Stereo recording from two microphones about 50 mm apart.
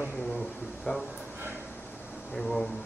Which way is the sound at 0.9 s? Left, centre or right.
Left.